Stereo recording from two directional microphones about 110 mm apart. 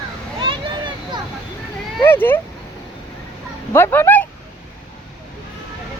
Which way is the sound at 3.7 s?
25° left (ahead or behind).